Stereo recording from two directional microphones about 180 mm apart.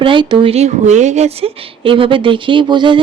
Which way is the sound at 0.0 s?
25° right (ahead or behind).